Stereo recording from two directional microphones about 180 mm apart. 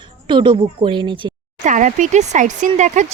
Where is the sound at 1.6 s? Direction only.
45° right (ahead or behind).